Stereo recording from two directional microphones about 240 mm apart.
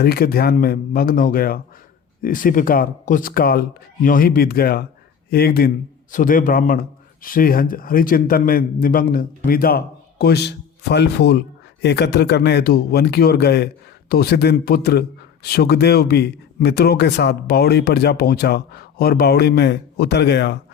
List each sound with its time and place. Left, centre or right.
0.0 s a man's voice: left